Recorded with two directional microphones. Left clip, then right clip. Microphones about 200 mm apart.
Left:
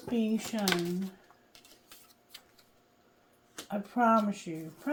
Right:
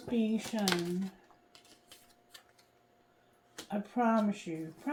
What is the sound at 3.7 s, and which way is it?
Speech, 40° left (ahead or behind).